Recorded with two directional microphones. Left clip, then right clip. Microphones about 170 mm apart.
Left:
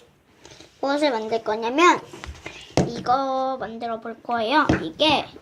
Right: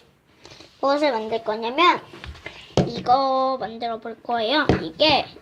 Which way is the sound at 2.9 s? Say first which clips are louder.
Right 5 dB; centre (ahead or behind).